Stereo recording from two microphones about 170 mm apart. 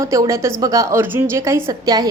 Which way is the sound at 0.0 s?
20° right (ahead or behind).